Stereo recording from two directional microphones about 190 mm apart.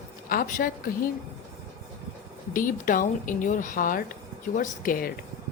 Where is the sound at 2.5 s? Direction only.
45° left (ahead or behind).